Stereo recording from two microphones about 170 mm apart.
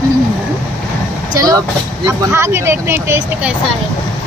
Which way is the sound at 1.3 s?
20° right (ahead or behind).